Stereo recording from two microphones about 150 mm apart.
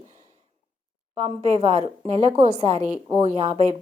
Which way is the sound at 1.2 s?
45° right (ahead or behind).